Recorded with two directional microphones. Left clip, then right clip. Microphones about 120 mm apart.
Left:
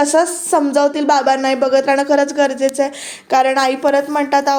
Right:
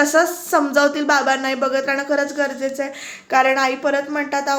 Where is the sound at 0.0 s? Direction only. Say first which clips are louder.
Left 2 dB; 50° left (ahead or behind).